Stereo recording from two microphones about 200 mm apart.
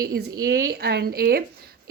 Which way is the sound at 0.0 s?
50° right (ahead or behind).